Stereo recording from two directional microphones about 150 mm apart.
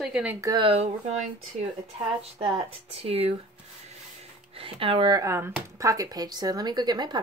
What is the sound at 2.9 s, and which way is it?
Speech, 40° right (ahead or behind).